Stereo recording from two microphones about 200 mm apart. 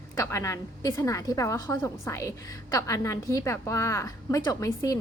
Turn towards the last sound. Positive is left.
turn(degrees=15)  # may be behind; listen again after turning